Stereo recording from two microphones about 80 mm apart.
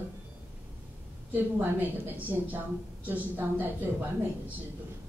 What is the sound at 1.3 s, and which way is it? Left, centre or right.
A woman's voice, right.